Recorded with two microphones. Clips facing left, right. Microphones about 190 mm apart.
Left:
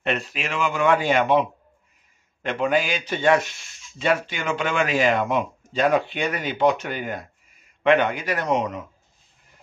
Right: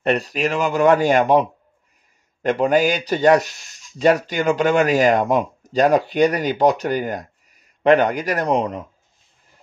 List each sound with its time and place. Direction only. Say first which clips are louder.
0.0 s speech: right 7 dB; 40° right (ahead or behind)